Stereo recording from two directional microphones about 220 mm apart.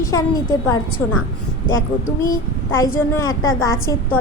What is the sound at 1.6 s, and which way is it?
Speech, 65° left (ahead or behind).